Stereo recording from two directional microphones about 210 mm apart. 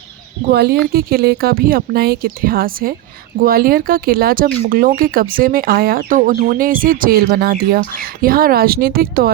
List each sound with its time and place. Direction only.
0.5 s speech: 50° right (ahead or behind)